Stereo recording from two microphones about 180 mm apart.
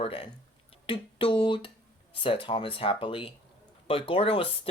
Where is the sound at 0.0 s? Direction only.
30° left (ahead or behind).